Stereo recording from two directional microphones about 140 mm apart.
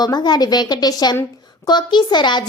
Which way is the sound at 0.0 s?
30° left (ahead or behind).